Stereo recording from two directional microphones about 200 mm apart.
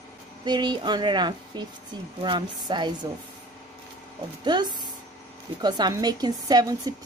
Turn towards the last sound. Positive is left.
turn(degrees=-20)  # may be behind; listen again after turning